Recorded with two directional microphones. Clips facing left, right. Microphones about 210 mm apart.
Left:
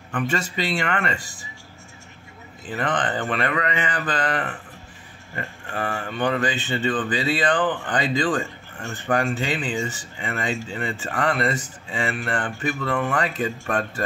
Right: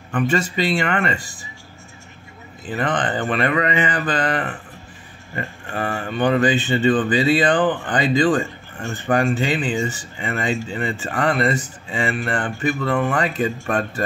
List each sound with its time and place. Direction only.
0.1 s speech: 15° right (ahead or behind)
2.7 s speech: 20° right (ahead or behind)